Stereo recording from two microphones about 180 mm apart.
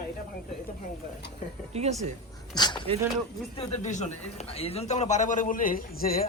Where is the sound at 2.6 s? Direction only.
25° left (ahead or behind).